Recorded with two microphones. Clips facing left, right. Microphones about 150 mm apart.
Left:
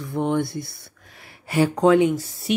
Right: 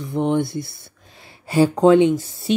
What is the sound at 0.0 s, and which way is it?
Speech, 25° right (ahead or behind).